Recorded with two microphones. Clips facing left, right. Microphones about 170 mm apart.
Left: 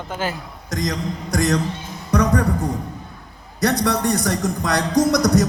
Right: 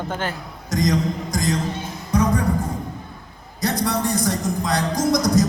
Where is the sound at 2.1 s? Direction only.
70° left (ahead or behind).